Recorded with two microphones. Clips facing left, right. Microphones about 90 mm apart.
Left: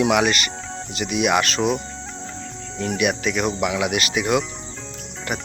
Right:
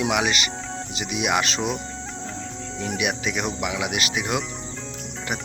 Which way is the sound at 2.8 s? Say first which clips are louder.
Left 5 dB; 10° right (ahead or behind).